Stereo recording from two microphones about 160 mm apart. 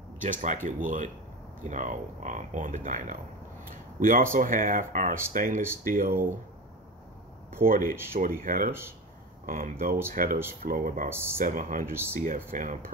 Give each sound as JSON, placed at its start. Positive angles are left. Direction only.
{"t": 0.2, "sound": "speech", "side_deg": -50}
{"t": 7.6, "sound": "speech", "side_deg": -60}